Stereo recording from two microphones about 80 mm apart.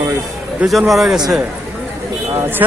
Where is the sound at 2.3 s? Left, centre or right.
Right.